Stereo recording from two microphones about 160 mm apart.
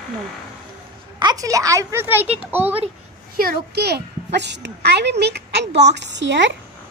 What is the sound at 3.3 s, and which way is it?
A child's voice, 80° right.